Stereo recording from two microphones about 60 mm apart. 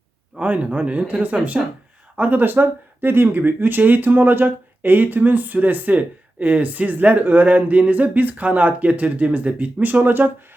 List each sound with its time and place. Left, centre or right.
0.4 s speech: right